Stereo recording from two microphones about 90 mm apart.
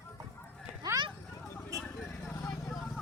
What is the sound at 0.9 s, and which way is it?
Vehicle, 40° right (ahead or behind).